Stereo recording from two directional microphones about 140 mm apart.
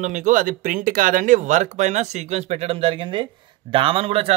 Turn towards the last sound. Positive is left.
turn(degrees=-40)  # may be behind; listen again after turning